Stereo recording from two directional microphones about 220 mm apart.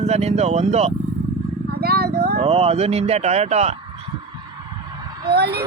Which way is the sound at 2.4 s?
30° right (ahead or behind).